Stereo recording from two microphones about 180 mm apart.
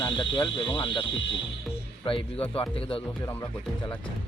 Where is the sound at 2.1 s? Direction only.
30° left (ahead or behind).